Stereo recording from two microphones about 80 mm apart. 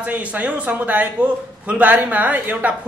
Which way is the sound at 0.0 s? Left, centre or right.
Centre.